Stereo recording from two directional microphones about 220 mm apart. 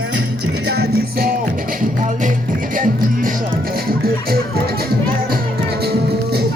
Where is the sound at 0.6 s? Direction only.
50° right (ahead or behind).